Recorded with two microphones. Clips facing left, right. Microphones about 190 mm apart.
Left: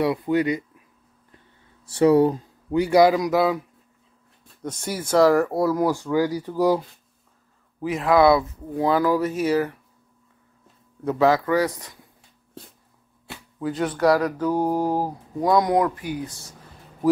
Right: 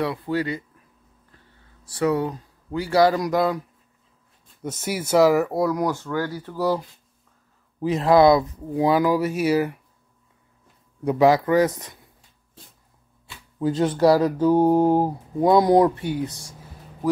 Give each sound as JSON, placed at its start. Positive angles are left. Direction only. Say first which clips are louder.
{"t": 0.0, "sound": "speech", "louder": "left 4 dB", "side_deg": 20}
{"t": 1.9, "sound": "speech", "louder": "left 6 dB", "side_deg": 30}
{"t": 2.7, "sound": "a man's voice", "louder": "left 2 dB", "side_deg": 15}
{"t": 3.2, "sound": "speech", "louder": "left 1 dB", "side_deg": 0}
{"t": 4.6, "sound": "speech", "louder": "right 2 dB", "side_deg": -5}
{"t": 7.8, "sound": "speech", "louder": "right 2 dB", "side_deg": -35}
{"t": 8.7, "sound": "speech", "louder": "right 1 dB", "side_deg": -15}
{"t": 11.1, "sound": "speech", "louder": "right 2 dB", "side_deg": -15}
{"t": 13.6, "sound": "speech", "louder": "right 4 dB", "side_deg": -25}